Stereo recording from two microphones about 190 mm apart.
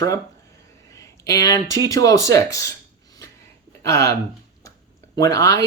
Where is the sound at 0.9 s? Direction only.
15° left (ahead or behind).